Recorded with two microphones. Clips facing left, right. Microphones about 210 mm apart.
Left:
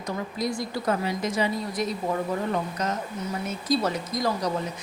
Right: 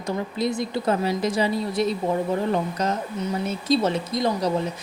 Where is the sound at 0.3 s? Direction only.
25° right (ahead or behind).